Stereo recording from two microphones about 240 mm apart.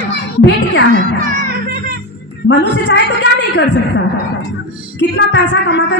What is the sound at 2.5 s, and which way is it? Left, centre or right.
Speech, left.